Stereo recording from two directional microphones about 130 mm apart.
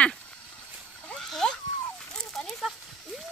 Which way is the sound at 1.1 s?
5° left (ahead or behind).